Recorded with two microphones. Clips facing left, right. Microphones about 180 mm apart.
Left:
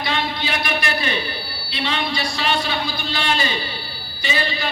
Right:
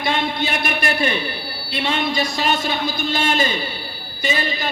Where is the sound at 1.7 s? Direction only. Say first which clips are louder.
Right 3 dB; 50° right (ahead or behind).